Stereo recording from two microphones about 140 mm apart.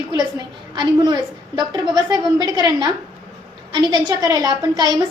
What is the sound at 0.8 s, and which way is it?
A woman's voice, 30° right (ahead or behind).